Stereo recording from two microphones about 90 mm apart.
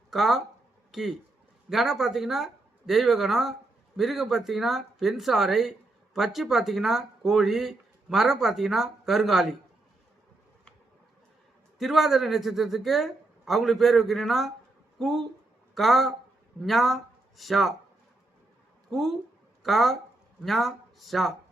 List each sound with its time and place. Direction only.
0.1 s speech: centre (ahead or behind)
0.9 s a sound: 5° right (ahead or behind)
1.7 s speech: centre (ahead or behind)
11.8 s speech: centre (ahead or behind)
18.9 s speech: centre (ahead or behind)